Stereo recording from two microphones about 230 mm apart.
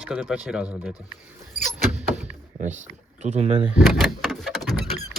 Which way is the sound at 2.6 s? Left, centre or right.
Right.